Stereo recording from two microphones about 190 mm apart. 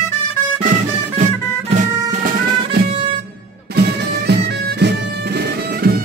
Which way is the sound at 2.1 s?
50° right (ahead or behind).